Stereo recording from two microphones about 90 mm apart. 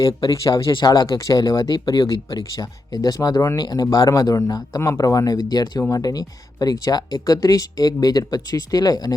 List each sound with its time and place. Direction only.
0.0 s speech: 40° left (ahead or behind)